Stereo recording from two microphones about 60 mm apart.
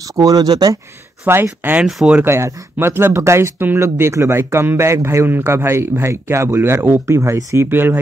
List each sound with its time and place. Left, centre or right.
0.1 s speech: right
1.2 s speech: right
3.5 s speech: right
3.8 s speech: right